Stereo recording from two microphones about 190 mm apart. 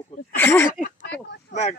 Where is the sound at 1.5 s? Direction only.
35° left (ahead or behind).